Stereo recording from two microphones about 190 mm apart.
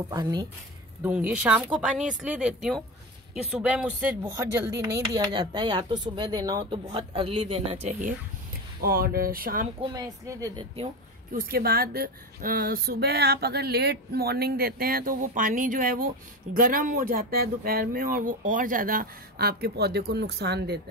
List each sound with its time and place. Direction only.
0.1 s speech: 20° right (ahead or behind)
1.0 s speech: 10° right (ahead or behind); by 8.1 s 35° right (ahead or behind)
8.8 s speech: 50° right (ahead or behind)
9.8 s speech: 20° right (ahead or behind)
11.3 s speech: 50° right (ahead or behind)